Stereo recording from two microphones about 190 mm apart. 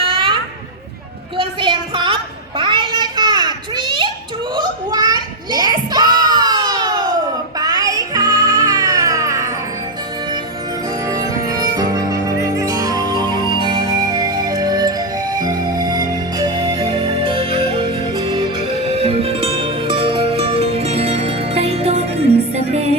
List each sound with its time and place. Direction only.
0.0 s a sound: 25° right (ahead or behind)
1.4 s a sound: 25° right (ahead or behind)
2.6 s babbling: 25° right (ahead or behind)
4.5 s child singing: 20° right (ahead or behind)
7.6 s music: 20° right (ahead or behind)
11.0 s music: 15° right (ahead or behind); by 23.0 s 35° right (ahead or behind)